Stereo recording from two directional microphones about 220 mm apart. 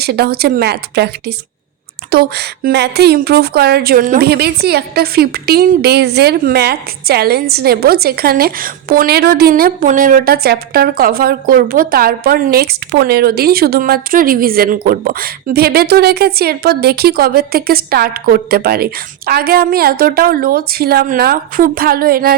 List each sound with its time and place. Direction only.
0.0 s speech: 45° right (ahead or behind)